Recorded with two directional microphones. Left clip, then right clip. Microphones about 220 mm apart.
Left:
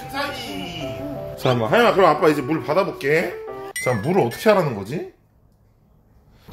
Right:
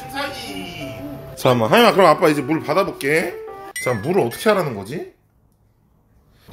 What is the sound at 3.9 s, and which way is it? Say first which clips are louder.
Speech: right 1 dB; 5° right (ahead or behind).